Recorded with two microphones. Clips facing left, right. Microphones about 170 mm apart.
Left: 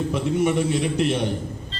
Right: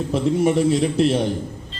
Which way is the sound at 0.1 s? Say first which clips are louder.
Right 6 dB; 35° right (ahead or behind).